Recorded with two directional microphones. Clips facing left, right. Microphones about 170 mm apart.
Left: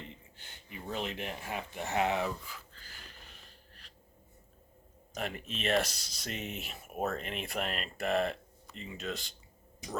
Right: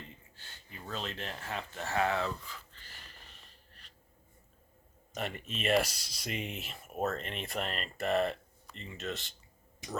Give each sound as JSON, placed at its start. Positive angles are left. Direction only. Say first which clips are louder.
{"t": 0.0, "sound": "speech", "louder": "left 3 dB", "side_deg": 20}
{"t": 2.7, "sound": "a sound", "louder": "left 2 dB", "side_deg": 0}
{"t": 5.1, "sound": "speech", "louder": "even", "side_deg": 0}
{"t": 6.3, "sound": "speech", "louder": "right 1 dB", "side_deg": 5}